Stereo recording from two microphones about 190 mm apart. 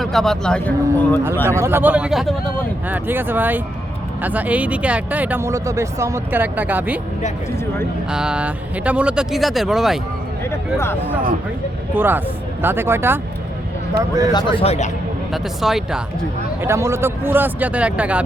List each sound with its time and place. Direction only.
0.0 s speech: centre (ahead or behind)
1.5 s speech: 15° right (ahead or behind)
8.1 s speech: 5° right (ahead or behind)
11.9 s speech: 10° right (ahead or behind)
14.3 s speech: 30° left (ahead or behind)
15.3 s speech: centre (ahead or behind)
16.6 s speech: 15° right (ahead or behind)